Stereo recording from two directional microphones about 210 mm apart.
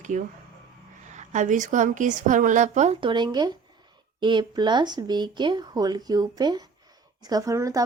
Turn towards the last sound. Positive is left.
turn(degrees=-15)  # may be behind; listen again after turning